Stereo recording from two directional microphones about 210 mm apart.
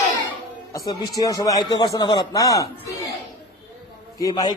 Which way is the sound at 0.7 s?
15° left (ahead or behind).